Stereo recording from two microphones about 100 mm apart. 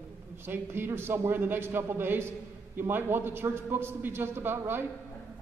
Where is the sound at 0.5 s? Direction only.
20° right (ahead or behind).